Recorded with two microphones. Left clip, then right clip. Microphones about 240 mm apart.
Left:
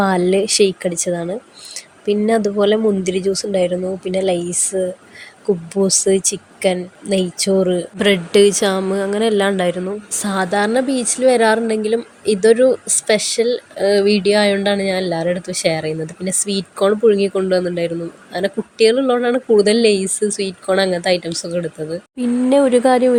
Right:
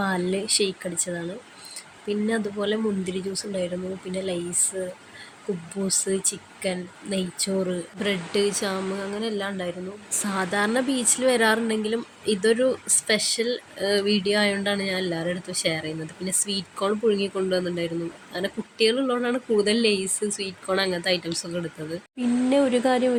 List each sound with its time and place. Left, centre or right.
0.0 s speech: left
10.1 s speech: left
22.2 s speech: left